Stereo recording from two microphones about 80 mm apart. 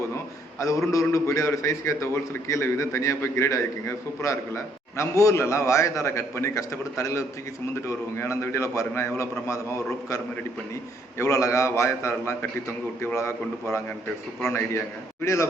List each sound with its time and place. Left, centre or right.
0.6 s a man's voice: left
11.2 s a man's voice: left